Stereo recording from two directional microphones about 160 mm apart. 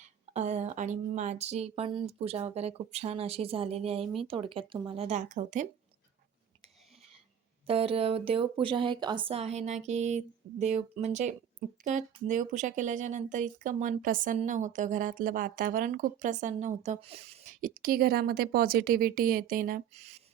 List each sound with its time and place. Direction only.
0.3 s speech: 45° right (ahead or behind)
7.7 s speech: 35° right (ahead or behind); by 19.8 s 60° right (ahead or behind)
19.9 s speech: 45° right (ahead or behind)